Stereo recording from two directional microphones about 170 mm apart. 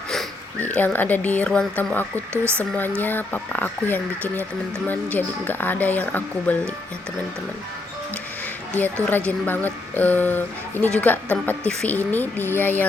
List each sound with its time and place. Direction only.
0.1 s speech: 5° left (ahead or behind)
2.3 s speech: 15° right (ahead or behind)
3.0 s speech: 10° left (ahead or behind)
9.0 s speech: 10° left (ahead or behind)